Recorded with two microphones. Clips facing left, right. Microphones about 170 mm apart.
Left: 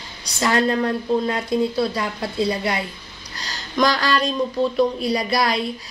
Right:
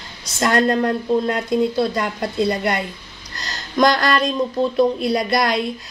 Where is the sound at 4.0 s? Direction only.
Centre (ahead or behind).